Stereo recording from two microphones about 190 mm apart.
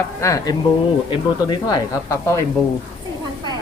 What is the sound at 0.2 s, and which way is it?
Speech, 15° left (ahead or behind).